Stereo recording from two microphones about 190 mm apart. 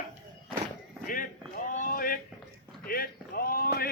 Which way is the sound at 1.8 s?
45° left (ahead or behind).